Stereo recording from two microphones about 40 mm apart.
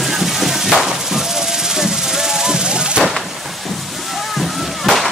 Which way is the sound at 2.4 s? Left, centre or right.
Centre.